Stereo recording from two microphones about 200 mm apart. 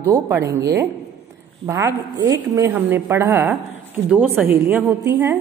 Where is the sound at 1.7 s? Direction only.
15° right (ahead or behind).